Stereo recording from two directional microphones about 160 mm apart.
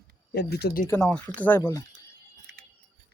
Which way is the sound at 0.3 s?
75° left (ahead or behind).